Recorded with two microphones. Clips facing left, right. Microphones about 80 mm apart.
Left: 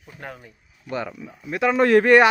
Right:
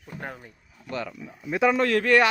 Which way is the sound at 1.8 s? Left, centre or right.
Left.